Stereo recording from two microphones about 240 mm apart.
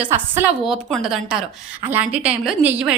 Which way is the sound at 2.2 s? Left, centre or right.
Centre.